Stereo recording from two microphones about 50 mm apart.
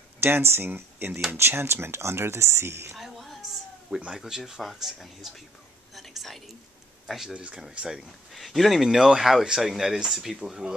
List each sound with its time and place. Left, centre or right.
0.2 s speech: right
3.0 s a sound: centre
4.1 s speech: centre
5.9 s whispering: centre
7.3 s speech: right
8.3 s speech: centre